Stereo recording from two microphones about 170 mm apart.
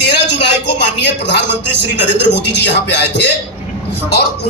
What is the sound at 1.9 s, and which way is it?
A man's voice, 90° left.